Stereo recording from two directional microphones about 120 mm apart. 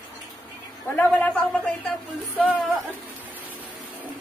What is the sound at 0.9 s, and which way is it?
Speech, 10° left (ahead or behind).